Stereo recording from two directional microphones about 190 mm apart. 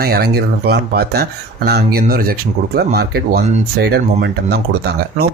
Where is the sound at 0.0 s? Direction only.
55° right (ahead or behind).